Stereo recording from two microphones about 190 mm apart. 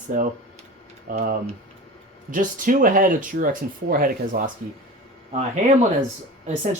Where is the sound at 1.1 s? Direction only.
45° right (ahead or behind).